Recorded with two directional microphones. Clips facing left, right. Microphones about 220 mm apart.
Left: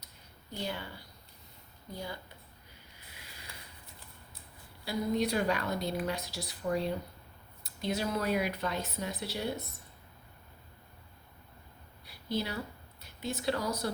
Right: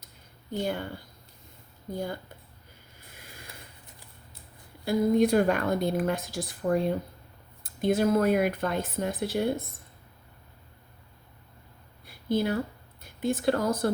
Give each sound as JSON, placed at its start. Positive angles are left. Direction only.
{"t": 0.5, "sound": "speech", "side_deg": -50}
{"t": 3.1, "sound": "a sound", "side_deg": -50}
{"t": 4.9, "sound": "speech", "side_deg": -50}
{"t": 12.0, "sound": "speech", "side_deg": -50}